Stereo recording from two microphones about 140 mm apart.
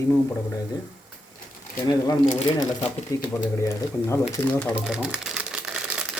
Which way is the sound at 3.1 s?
25° left (ahead or behind).